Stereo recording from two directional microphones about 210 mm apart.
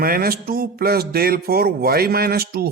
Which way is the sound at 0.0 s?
45° right (ahead or behind).